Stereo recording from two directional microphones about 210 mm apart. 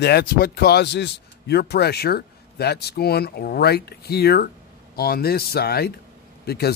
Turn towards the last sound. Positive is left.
turn(degrees=50)  # may be behind; listen again after turning